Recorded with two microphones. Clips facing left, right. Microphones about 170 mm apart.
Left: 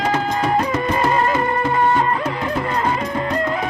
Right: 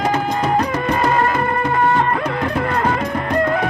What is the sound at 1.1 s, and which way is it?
Music, 50° right (ahead or behind).